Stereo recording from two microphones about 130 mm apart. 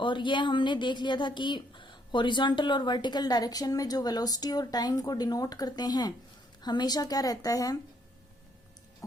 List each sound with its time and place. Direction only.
0.0 s a woman's voice: 40° left (ahead or behind)